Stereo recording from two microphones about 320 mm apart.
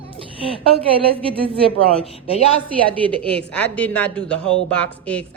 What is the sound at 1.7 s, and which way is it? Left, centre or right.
Speech, centre.